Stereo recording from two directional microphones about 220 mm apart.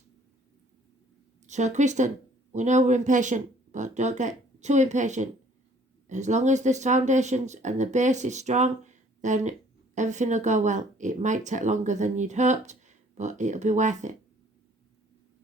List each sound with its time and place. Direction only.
1.5 s speech: 30° right (ahead or behind)